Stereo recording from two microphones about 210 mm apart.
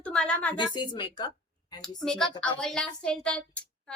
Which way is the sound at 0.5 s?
20° left (ahead or behind).